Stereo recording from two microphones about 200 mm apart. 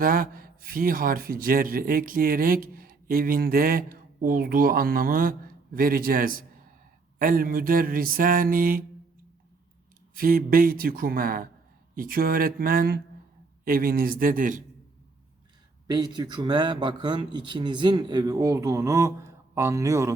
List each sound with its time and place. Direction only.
0.0 s a man's voice: 45° right (ahead or behind)
10.2 s a man's voice: 45° right (ahead or behind)
15.9 s speech: 20° right (ahead or behind)